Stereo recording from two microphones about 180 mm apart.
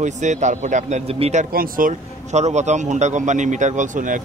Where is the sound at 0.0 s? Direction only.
40° right (ahead or behind).